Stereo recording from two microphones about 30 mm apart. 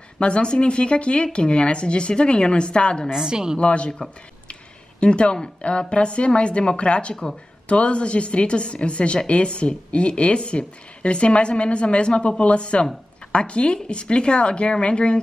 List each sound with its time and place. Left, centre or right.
0.2 s speech: left
3.1 s a woman's voice: right
3.5 s speech: left
5.0 s speech: left